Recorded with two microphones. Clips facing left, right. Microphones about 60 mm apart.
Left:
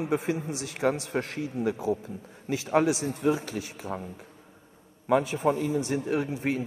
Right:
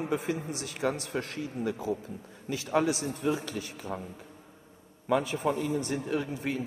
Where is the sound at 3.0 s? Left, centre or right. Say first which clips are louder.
Left 4 dB; left.